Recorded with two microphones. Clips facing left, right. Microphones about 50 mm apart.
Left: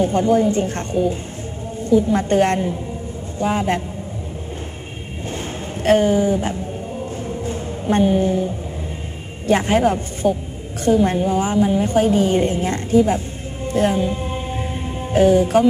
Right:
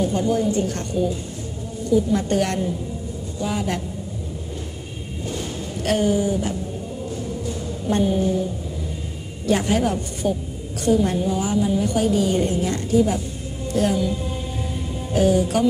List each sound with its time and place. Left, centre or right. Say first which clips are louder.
0.0 s a woman's voice: left 5 dB; left
5.8 s a woman's voice: left 5 dB; left
7.2 s music: left 3 dB; left
9.5 s a woman's voice: left 4 dB; left
10.2 s a woman's voice: left 5 dB; centre
10.9 s a woman's voice: left 3 dB; left
13.7 s music: left 3 dB; left